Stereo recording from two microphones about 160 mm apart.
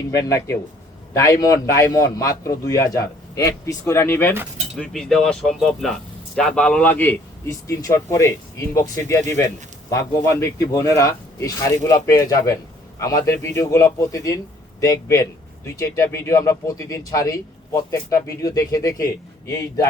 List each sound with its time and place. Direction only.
0.1 s a man's voice: 20° left (ahead or behind)
4.8 s a man's voice: 5° left (ahead or behind); by 19.8 s 20° left (ahead or behind)